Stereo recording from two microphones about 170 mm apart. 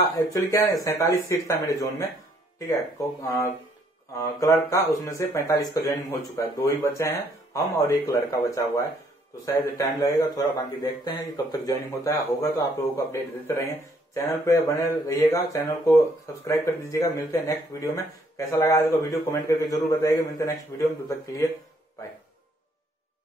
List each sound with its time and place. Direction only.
0.1 s a man's voice: 20° left (ahead or behind)